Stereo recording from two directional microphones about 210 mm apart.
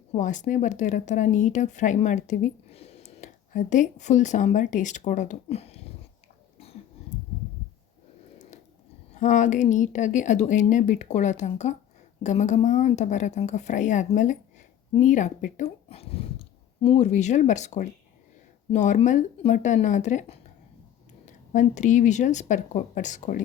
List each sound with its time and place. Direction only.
0.1 s speech: 35° left (ahead or behind)
9.1 s speech: 35° left (ahead or behind)